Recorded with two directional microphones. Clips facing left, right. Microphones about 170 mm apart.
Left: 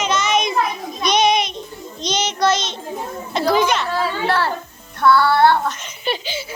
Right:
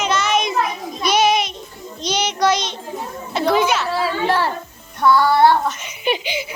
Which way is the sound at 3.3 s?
5° right (ahead or behind).